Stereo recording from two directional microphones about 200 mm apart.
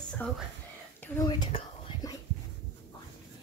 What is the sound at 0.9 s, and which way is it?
Whispering, 10° left (ahead or behind).